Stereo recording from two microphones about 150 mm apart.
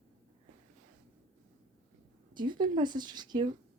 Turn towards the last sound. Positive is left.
turn(degrees=-30)  # may be behind; listen again after turning